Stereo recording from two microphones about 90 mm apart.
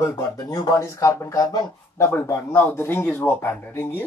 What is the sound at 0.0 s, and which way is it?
Speech, 30° left (ahead or behind).